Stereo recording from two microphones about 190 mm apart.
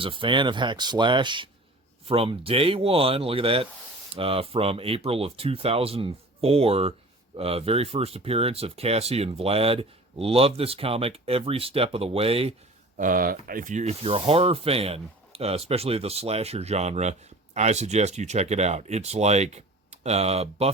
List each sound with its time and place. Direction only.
0.0 s speech: 25° right (ahead or behind)
13.0 s speech: 45° right (ahead or behind)